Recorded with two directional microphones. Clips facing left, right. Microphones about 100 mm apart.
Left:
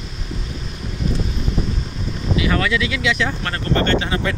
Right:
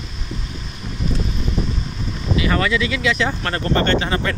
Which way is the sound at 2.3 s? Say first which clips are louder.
Right 1 dB; 5° left (ahead or behind).